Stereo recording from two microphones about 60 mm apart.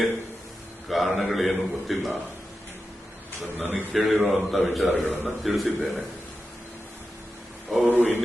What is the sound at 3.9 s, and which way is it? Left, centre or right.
A man's voice, centre.